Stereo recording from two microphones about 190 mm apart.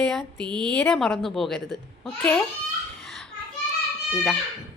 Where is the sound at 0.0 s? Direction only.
5° left (ahead or behind).